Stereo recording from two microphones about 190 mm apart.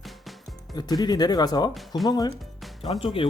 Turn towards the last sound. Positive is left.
turn(degrees=30)  # may be behind; listen again after turning